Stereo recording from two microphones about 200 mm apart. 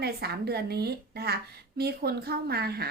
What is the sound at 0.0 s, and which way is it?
Speech, 50° right (ahead or behind).